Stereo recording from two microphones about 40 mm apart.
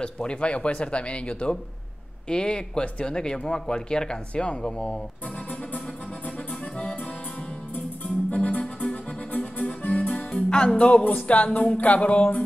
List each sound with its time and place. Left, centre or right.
0.0 s speech: left
7.7 s music: left